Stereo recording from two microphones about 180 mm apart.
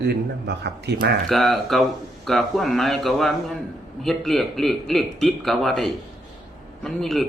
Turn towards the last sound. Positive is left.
turn(degrees=0)  # may be behind; listen again after turning